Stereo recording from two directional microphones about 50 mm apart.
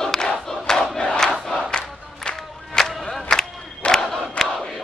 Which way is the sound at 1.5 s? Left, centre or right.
Centre.